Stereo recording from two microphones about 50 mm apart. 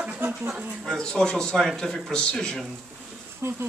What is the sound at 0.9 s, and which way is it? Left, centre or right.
Speech, centre.